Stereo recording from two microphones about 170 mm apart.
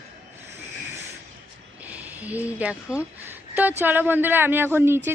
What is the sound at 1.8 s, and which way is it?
Speech, 10° right (ahead or behind).